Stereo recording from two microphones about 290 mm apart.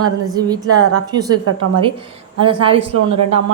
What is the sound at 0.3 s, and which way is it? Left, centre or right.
Speech, centre.